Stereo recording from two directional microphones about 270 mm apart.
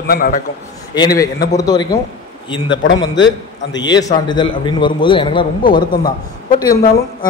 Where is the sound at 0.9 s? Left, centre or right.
Centre.